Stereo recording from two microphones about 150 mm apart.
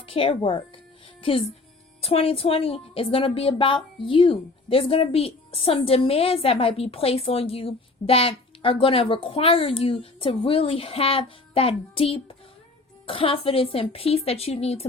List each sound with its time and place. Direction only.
0.0 s a woman's voice: 40° left (ahead or behind)